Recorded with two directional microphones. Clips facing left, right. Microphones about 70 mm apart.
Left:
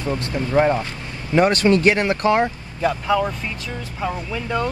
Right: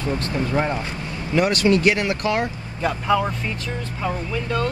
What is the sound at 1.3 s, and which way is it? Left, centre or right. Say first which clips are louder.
Speech: left 2 dB; left.